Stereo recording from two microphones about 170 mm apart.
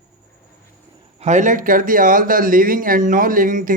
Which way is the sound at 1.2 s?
45° right (ahead or behind).